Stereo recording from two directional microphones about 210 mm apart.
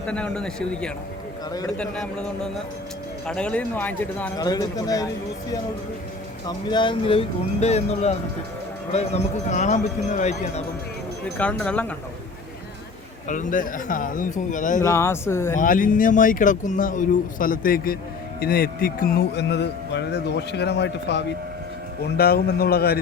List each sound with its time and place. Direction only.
0.0 s speech: 5° left (ahead or behind)
4.4 s speech: 20° left (ahead or behind)
6.7 s speech: 20° left (ahead or behind)
11.3 s speech: 5° left (ahead or behind)
13.2 s speech: 35° left (ahead or behind)
14.8 s speech: 15° left (ahead or behind)
15.5 s speech: 40° left (ahead or behind)